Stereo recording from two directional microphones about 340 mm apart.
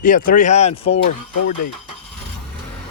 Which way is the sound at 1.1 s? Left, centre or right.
Left.